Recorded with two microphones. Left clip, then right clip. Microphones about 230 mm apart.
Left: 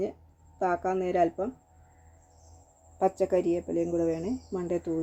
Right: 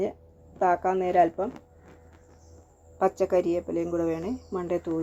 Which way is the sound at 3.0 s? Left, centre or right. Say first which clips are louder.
Right 2 dB; centre.